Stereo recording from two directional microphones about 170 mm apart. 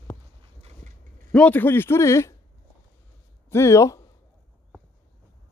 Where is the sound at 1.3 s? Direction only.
10° left (ahead or behind).